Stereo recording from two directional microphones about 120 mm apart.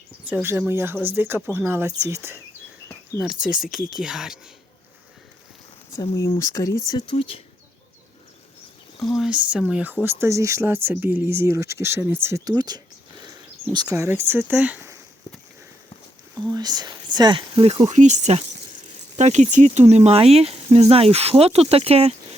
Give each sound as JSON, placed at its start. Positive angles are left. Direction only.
{"t": 0.7, "sound": "speech", "side_deg": -20}
{"t": 3.4, "sound": "speech", "side_deg": -5}
{"t": 6.4, "sound": "speech", "side_deg": 25}
{"t": 7.2, "sound": "speech", "side_deg": 50}
{"t": 9.0, "sound": "speech", "side_deg": 0}
{"t": 12.5, "sound": "speech", "side_deg": -35}
{"t": 16.3, "sound": "speech", "side_deg": -35}
{"t": 17.8, "sound": "speech", "side_deg": -80}